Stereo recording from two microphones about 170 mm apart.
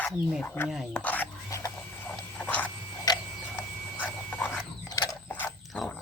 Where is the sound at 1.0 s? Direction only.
10° left (ahead or behind).